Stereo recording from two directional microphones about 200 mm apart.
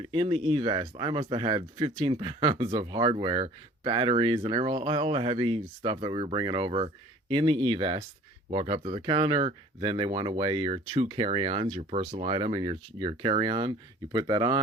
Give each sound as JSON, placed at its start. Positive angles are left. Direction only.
{"t": 0.1, "sound": "speech", "side_deg": -25}